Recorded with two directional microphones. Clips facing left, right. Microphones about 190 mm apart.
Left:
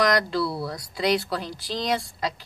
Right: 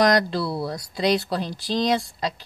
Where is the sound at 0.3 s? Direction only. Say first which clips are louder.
Right 1 dB; 25° right (ahead or behind).